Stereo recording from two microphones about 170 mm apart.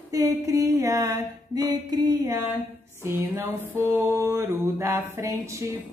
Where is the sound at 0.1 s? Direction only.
20° right (ahead or behind).